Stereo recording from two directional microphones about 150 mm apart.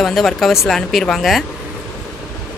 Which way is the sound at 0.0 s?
Centre (ahead or behind).